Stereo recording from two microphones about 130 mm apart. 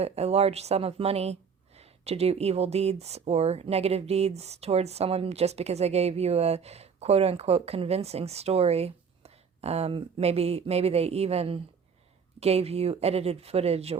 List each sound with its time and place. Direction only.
0.0 s speech: 55° right (ahead or behind)